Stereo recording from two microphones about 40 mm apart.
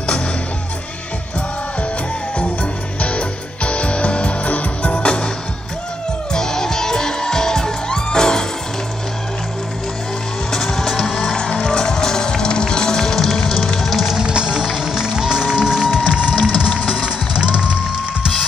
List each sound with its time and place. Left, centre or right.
2.3 s music: left
6.3 s music: centre
10.5 s music: centre
14.2 s music: right
16.3 s music: centre